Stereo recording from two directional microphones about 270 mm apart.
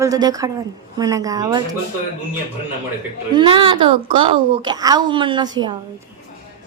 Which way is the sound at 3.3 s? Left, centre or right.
Centre.